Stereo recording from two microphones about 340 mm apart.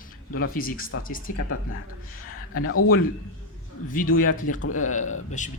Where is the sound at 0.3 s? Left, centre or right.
Left.